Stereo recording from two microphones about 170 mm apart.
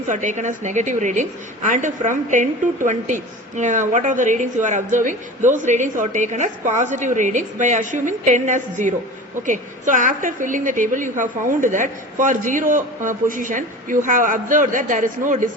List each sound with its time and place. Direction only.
0.1 s a woman's voice: 45° right (ahead or behind)